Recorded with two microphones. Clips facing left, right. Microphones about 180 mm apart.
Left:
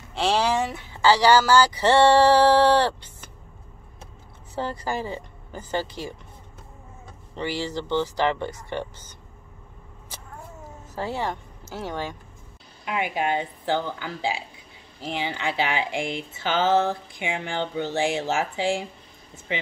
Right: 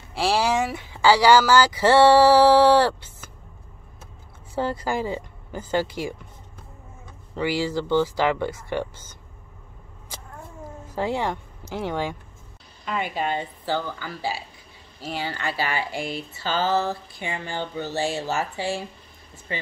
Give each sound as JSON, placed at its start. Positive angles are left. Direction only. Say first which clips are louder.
{"t": 0.1, "sound": "speech", "louder": "right 1 dB", "side_deg": -10}
{"t": 4.6, "sound": "speech", "louder": "right 3 dB", "side_deg": -10}
{"t": 7.3, "sound": "speech", "louder": "right 4 dB", "side_deg": -10}
{"t": 11.0, "sound": "speech", "louder": "right 3 dB", "side_deg": -15}
{"t": 12.8, "sound": "speech", "louder": "left 1 dB", "side_deg": 10}